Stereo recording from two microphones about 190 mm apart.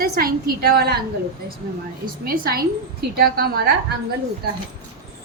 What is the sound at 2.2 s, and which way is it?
A woman's voice, 50° right (ahead or behind).